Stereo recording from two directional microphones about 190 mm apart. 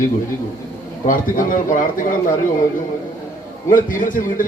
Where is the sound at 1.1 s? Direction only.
45° left (ahead or behind).